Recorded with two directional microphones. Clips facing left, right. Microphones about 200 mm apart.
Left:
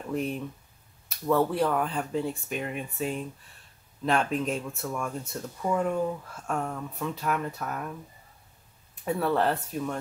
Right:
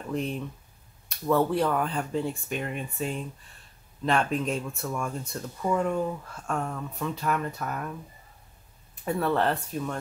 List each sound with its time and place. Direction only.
0.1 s speech: 5° left (ahead or behind)
9.0 s speech: 5° left (ahead or behind)